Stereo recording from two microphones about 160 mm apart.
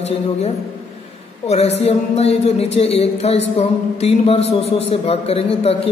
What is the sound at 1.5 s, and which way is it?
A woman's voice, 45° left (ahead or behind).